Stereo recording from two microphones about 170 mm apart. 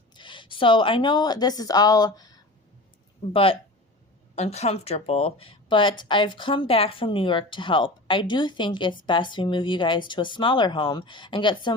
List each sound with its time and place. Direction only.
0.1 s a woman's voice: 30° left (ahead or behind)
3.3 s speech: 35° left (ahead or behind)